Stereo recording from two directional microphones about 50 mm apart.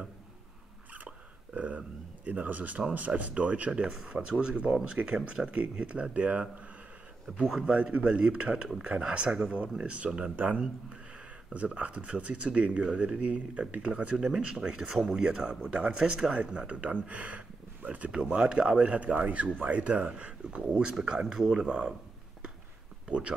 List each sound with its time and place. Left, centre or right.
0.9 s a sound: right
2.2 s speech: right
7.3 s speech: centre
11.5 s speech: right
14.2 s speech: centre
21.6 s speech: right
23.0 s speech: right